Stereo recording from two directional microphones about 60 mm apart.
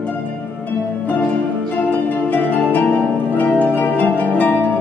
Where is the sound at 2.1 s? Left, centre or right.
Left.